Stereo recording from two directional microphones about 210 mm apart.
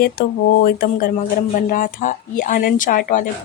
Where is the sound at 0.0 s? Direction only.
45° left (ahead or behind).